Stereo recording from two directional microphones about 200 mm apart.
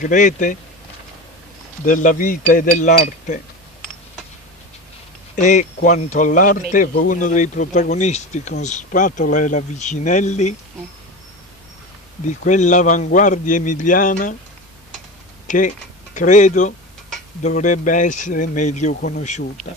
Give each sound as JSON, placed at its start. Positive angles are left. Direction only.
{"t": 0.0, "sound": "a man's voice", "side_deg": 40}
{"t": 1.9, "sound": "a man's voice", "side_deg": 40}
{"t": 5.3, "sound": "a man's voice", "side_deg": 40}
{"t": 12.3, "sound": "a man's voice", "side_deg": 40}
{"t": 15.4, "sound": "a sound", "side_deg": 40}
{"t": 16.2, "sound": "a man's voice", "side_deg": 40}